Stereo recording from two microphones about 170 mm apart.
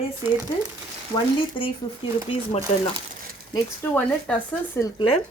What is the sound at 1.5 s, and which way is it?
Speech, 30° left (ahead or behind).